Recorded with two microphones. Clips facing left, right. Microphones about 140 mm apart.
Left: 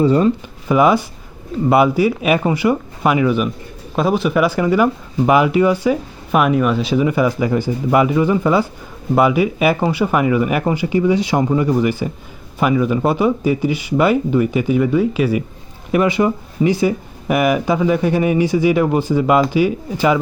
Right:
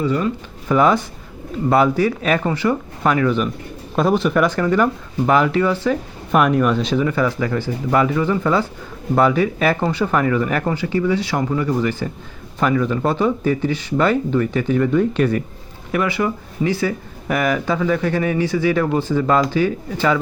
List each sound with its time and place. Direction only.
0.0 s speech: 30° left (ahead or behind)
0.7 s speech: 10° left (ahead or behind)
15.9 s speech: 20° left (ahead or behind)